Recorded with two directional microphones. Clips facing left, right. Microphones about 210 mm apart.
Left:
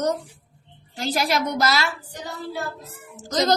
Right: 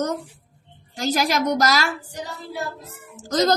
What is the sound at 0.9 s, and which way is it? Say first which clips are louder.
Speech: right 2 dB; 45° right (ahead or behind).